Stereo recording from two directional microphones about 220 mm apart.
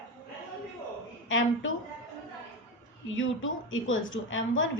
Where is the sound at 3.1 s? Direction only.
60° left (ahead or behind).